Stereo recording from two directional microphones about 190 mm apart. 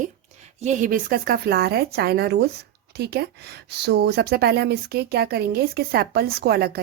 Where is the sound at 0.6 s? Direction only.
40° right (ahead or behind).